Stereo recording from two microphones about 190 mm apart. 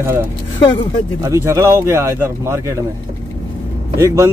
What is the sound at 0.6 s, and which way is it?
Speech, 25° left (ahead or behind).